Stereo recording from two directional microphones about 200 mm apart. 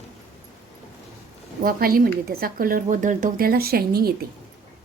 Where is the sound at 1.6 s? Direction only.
45° right (ahead or behind).